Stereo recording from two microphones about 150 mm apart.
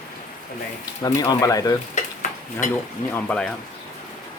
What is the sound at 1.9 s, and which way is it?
Stir, 55° left (ahead or behind).